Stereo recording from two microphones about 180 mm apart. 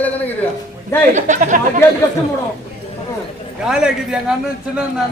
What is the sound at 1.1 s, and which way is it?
Speech, 40° right (ahead or behind).